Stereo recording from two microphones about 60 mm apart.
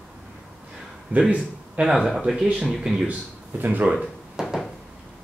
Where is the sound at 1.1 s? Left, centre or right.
Right.